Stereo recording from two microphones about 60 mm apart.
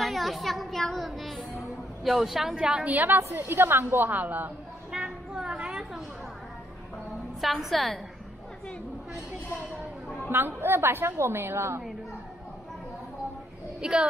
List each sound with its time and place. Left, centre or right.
0.0 s a child's voice: centre
2.9 s a woman's voice: right
3.2 s a woman's voice: right
4.9 s a sound: centre
7.3 s a woman's voice: centre
10.3 s a woman's voice: right
13.7 s speech: centre